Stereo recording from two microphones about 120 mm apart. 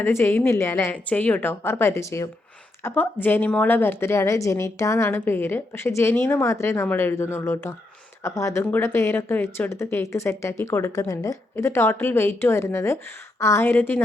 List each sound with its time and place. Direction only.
0.0 s speech: 20° left (ahead or behind)